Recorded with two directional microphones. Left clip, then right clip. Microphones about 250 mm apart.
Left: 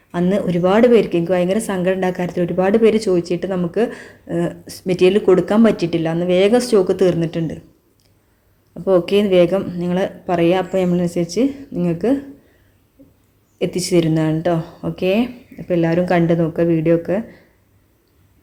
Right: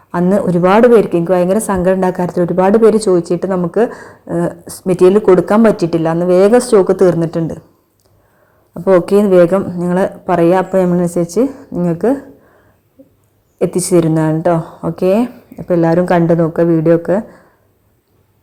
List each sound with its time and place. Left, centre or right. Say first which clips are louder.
0.3 s speech: right 5 dB; centre
3.5 s speech: right 6 dB; centre
4.4 s speech: right 4 dB; centre
8.7 s speech: right 5 dB; centre
13.6 s speech: right 5 dB; centre